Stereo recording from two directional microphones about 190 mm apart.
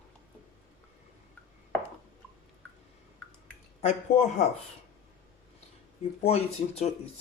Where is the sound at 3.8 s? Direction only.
40° left (ahead or behind).